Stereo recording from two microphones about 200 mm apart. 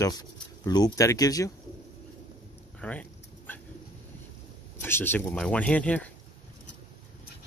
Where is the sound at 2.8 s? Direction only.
5° left (ahead or behind).